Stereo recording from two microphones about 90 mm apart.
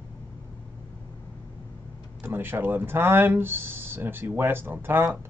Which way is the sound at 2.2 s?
25° right (ahead or behind).